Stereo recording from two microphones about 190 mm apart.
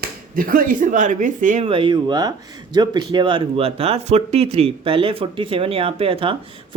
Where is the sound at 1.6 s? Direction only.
25° right (ahead or behind).